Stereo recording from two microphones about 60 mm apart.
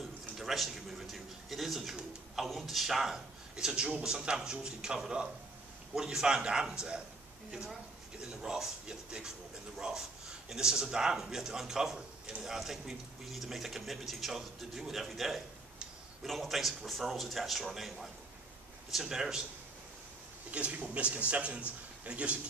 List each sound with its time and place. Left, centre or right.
0.4 s pigeon: centre
2.4 s a man's voice: centre
8.2 s a man's voice: centre
20.5 s a man's voice: right